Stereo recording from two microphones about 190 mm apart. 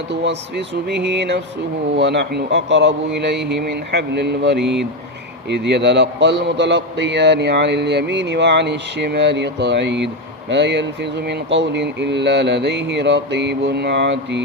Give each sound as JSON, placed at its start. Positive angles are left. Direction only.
{"t": 0.9, "sound": "a man's voice", "side_deg": -65}